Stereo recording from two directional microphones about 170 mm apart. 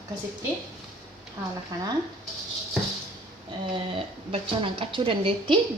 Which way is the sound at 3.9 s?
30° right (ahead or behind).